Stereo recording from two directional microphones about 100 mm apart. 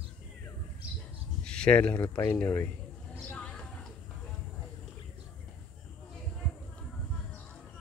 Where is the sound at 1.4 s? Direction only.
10° left (ahead or behind).